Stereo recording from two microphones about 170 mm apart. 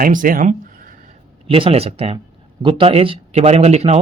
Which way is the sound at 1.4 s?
35° right (ahead or behind).